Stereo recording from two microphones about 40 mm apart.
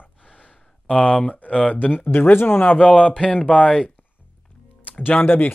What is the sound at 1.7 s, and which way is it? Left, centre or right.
Speech, left.